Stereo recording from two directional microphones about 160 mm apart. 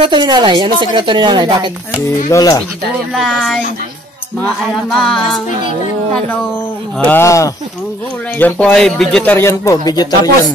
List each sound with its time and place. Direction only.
0.0 s speech: 30° right (ahead or behind)
2.2 s speech: 20° left (ahead or behind)
3.2 s music: centre (ahead or behind)
4.8 s music: centre (ahead or behind)
7.0 s speech: 15° left (ahead or behind)